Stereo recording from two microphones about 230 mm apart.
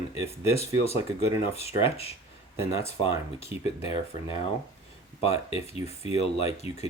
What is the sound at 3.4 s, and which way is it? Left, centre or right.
Speech, left.